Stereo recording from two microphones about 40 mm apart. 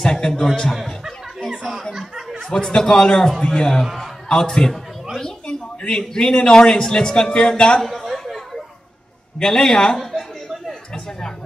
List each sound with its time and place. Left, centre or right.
0.0 s a man's voice: centre
2.5 s a man's voice: centre
3.8 s a man's voice: centre
4.3 s a man's voice: centre
7.8 s chatter: centre
9.4 s a man's voice: centre